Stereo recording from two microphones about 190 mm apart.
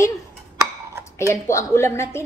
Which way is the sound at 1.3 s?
15° left (ahead or behind).